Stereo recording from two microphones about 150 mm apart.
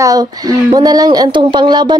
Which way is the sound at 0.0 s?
25° right (ahead or behind).